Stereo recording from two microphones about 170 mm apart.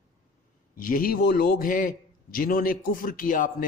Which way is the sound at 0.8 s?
55° left (ahead or behind).